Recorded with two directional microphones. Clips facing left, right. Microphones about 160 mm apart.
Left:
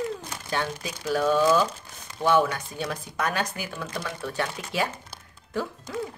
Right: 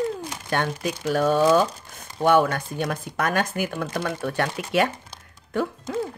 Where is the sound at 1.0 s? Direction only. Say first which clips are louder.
Right 2 dB; 45° right (ahead or behind); by 4.9 s 65° right (ahead or behind).